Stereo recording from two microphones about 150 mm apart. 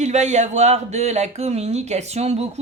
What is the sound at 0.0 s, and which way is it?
Speech, 50° right (ahead or behind).